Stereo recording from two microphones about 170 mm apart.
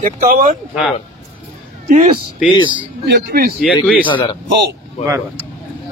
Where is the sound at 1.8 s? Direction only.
45° right (ahead or behind).